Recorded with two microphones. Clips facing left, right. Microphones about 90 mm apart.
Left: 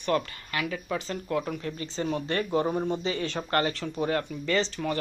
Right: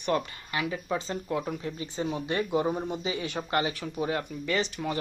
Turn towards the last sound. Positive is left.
turn(degrees=-10)  # may be behind; listen again after turning